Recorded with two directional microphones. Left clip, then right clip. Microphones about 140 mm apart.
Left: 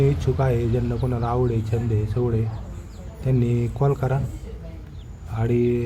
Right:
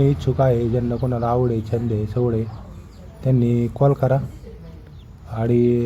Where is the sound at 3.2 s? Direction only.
40° right (ahead or behind).